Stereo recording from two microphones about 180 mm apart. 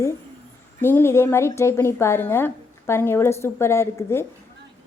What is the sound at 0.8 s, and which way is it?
A woman's voice, 15° left (ahead or behind).